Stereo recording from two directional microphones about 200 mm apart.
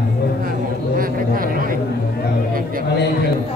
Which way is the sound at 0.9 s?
45° right (ahead or behind).